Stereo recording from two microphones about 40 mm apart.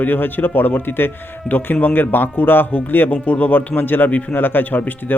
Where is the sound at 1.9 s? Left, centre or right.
Left.